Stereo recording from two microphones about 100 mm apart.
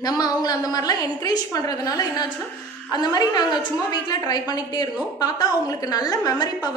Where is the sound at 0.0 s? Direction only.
40° left (ahead or behind).